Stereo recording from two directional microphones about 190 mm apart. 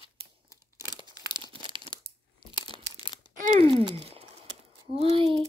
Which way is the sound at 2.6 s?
25° left (ahead or behind).